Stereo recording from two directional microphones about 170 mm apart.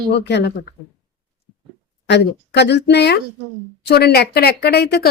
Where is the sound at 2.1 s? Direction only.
85° left.